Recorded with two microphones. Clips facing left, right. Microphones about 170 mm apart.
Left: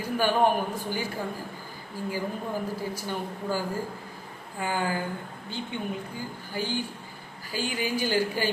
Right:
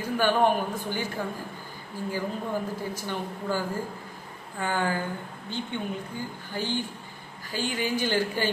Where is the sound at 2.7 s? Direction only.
10° left (ahead or behind).